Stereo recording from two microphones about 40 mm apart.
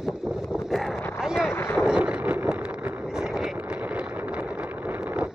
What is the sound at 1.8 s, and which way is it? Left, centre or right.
Vehicle, right.